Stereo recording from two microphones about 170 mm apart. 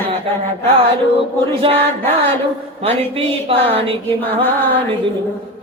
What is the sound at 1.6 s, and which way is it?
Mantra, 30° right (ahead or behind).